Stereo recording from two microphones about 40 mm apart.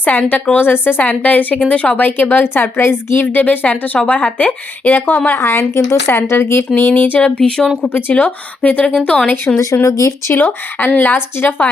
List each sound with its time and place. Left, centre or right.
0.0 s speech: left
1.2 s speech: left
3.3 s speech: left
4.9 s speech: left
6.1 s speech: left
6.7 s speech: left
7.2 s speech: left
8.1 s speech: left
9.5 s speech: left